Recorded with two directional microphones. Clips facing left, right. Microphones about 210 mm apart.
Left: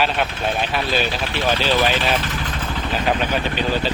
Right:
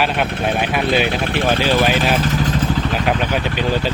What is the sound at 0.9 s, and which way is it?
Speech, 60° right (ahead or behind).